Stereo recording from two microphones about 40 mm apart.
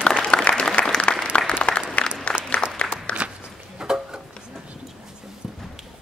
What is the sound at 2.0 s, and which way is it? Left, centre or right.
Applause, left.